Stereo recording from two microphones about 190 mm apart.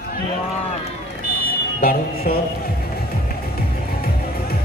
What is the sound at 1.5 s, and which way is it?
Music, 50° left (ahead or behind).